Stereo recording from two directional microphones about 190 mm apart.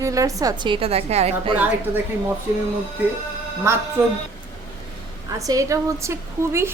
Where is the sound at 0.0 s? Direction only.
15° right (ahead or behind); by 1.5 s 35° right (ahead or behind).